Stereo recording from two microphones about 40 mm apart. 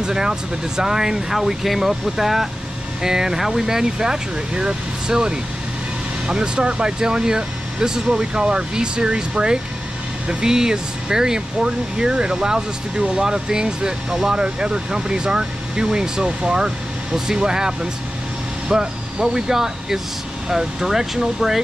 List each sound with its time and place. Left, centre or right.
0.0 s speech: centre